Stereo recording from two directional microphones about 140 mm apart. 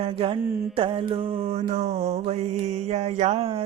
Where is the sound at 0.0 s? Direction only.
45° right (ahead or behind).